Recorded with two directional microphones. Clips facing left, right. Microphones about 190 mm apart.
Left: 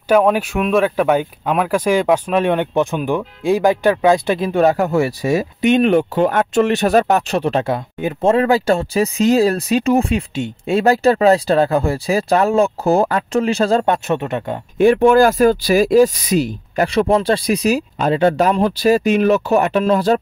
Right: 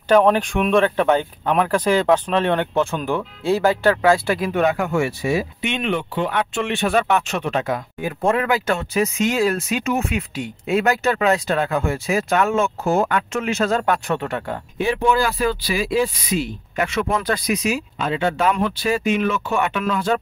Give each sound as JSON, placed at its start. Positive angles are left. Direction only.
{"t": 0.1, "sound": "speech", "side_deg": 10}
{"t": 14.8, "sound": "speech", "side_deg": 50}